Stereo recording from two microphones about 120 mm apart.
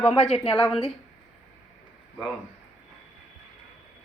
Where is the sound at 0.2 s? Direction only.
60° left (ahead or behind).